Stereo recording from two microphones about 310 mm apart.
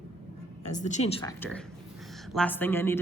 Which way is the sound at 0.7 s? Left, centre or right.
Left.